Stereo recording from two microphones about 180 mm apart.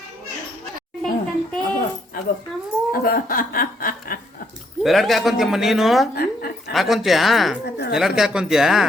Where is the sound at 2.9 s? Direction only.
55° left (ahead or behind).